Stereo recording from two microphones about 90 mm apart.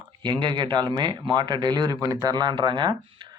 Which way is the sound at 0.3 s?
55° right (ahead or behind).